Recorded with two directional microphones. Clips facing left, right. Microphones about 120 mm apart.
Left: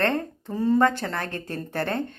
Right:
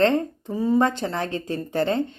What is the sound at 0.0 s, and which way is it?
Speech, 15° right (ahead or behind).